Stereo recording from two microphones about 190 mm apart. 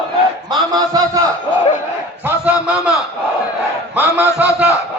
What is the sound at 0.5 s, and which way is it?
Speech, 20° right (ahead or behind).